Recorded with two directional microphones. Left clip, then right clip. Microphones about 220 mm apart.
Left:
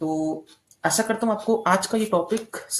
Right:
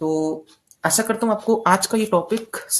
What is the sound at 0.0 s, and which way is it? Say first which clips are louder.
Speech: right 4 dB; 50° right (ahead or behind).